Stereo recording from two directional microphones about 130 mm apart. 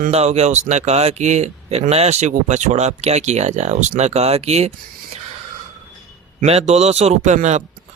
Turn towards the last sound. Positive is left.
turn(degrees=-65)  # may be behind; listen again after turning